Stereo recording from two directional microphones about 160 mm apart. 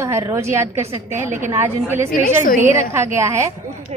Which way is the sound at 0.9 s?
50° right (ahead or behind).